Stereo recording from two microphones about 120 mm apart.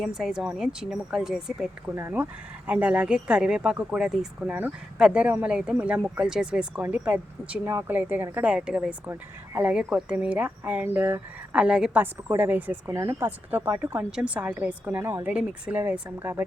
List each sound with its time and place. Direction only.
0.0 s speech: 5° right (ahead or behind)
2.0 s speech: 15° right (ahead or behind)